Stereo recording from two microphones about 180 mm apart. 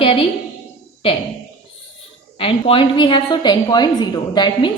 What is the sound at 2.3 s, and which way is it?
A woman's voice, 30° left (ahead or behind).